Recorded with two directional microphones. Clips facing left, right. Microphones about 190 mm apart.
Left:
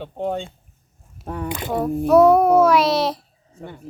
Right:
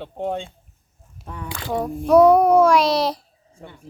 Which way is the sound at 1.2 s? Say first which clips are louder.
Left 7 dB; 45° left (ahead or behind).